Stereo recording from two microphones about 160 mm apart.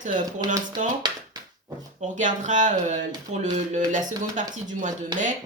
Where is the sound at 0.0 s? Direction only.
55° right (ahead or behind).